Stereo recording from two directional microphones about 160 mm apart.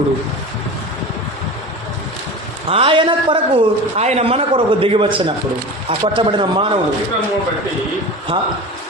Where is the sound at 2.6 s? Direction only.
35° right (ahead or behind).